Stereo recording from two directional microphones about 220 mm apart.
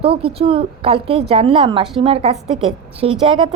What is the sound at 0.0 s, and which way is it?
A woman's voice, 25° right (ahead or behind).